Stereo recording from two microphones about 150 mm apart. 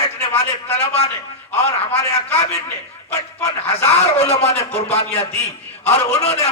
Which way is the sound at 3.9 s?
45° left (ahead or behind).